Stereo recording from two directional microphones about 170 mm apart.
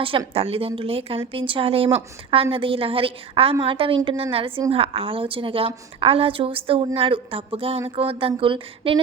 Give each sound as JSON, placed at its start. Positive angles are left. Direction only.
{"t": 0.0, "sound": "a woman's voice", "side_deg": -30}